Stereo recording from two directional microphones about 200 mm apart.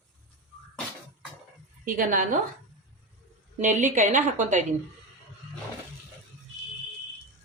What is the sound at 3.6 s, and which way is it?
Speech, 40° right (ahead or behind).